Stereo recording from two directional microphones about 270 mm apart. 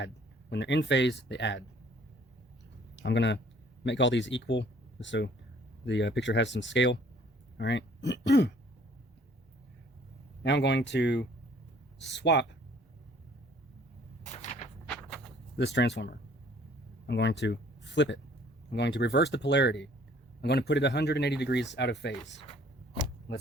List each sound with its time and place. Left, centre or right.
0.5 s speech: left
3.0 s speech: left
10.4 s speech: left
15.5 s speech: left